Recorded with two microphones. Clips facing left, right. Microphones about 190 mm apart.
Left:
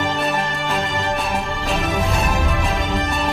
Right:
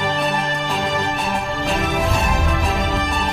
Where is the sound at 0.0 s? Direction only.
Centre (ahead or behind).